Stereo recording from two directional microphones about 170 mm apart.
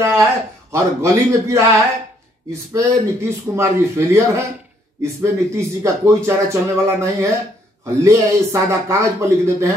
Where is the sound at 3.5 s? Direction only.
15° right (ahead or behind).